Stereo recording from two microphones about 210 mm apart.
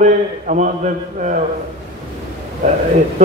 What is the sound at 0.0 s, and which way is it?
A man's voice, 35° right (ahead or behind).